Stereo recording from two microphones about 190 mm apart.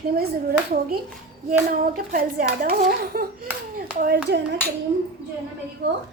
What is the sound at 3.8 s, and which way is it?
Speech, 50° right (ahead or behind).